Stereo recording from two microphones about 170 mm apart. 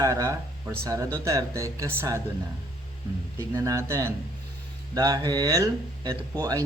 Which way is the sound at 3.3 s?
20° right (ahead or behind).